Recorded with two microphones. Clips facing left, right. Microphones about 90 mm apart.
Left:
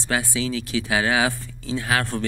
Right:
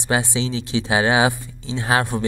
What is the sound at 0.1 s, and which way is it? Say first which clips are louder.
Speech: right 3 dB; 20° right (ahead or behind).